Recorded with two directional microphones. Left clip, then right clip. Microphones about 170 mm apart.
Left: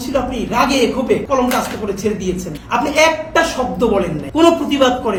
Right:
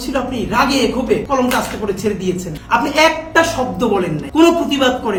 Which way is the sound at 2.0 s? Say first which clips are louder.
Even; 15° right (ahead or behind).